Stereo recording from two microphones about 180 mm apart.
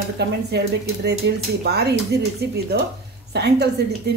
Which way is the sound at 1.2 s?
80° right.